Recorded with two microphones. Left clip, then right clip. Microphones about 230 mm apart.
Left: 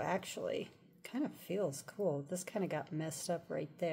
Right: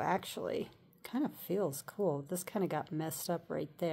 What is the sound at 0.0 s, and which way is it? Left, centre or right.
Speech, right.